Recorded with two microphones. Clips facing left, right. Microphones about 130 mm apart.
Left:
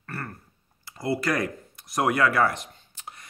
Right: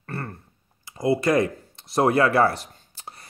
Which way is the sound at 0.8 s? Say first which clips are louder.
Right 5 dB; 20° right (ahead or behind).